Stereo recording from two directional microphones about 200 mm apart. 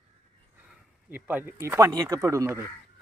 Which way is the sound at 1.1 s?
10° right (ahead or behind).